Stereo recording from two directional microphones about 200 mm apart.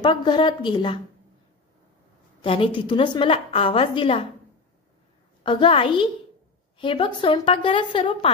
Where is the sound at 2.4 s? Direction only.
25° left (ahead or behind).